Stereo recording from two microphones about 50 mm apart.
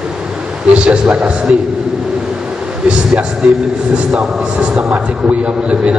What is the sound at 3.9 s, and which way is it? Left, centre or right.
A man's voice, right.